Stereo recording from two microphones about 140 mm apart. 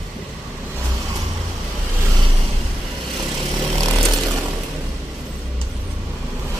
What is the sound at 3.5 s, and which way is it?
Vehicle, 30° right (ahead or behind).